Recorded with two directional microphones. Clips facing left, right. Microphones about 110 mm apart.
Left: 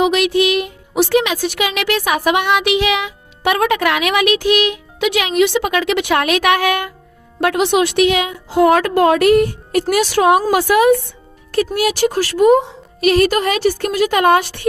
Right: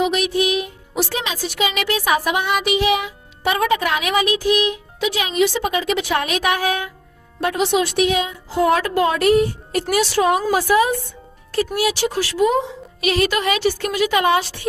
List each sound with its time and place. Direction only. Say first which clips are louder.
0.0 s a woman's voice: left 5 dB; 85° left; by 11.0 s 70° left (ahead or behind)
11.5 s a woman's voice: left 3 dB; 55° left (ahead or behind)